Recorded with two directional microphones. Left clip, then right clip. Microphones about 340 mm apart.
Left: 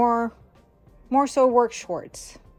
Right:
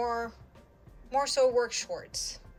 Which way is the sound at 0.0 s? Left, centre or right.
Centre.